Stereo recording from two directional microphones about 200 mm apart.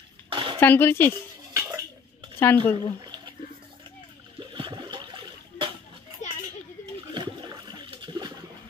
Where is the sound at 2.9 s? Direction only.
20° right (ahead or behind).